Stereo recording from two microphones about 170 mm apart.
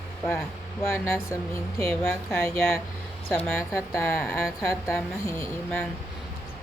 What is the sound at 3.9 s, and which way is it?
Speech, 15° left (ahead or behind).